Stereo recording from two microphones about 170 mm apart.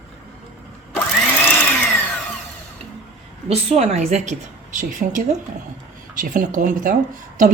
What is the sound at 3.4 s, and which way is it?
A woman's voice, 40° right (ahead or behind).